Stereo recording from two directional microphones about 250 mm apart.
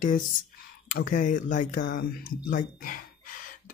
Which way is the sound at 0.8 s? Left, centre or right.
Left.